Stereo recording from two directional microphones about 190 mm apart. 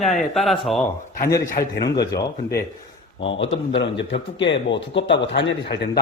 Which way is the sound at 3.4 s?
30° left (ahead or behind).